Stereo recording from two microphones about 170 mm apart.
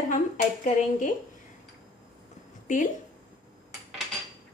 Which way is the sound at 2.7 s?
45° left (ahead or behind).